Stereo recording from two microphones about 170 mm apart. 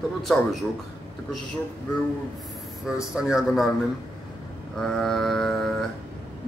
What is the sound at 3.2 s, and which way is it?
Speech, 5° right (ahead or behind).